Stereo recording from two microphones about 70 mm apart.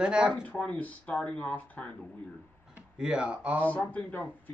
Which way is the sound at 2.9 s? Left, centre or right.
Centre.